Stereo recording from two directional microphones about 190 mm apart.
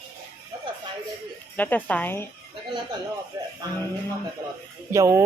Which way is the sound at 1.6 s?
10° left (ahead or behind).